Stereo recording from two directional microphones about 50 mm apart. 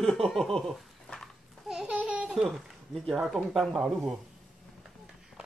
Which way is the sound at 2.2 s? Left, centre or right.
Centre.